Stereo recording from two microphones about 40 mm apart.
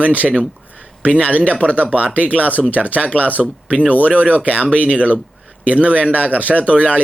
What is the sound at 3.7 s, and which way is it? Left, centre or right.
Speech, right.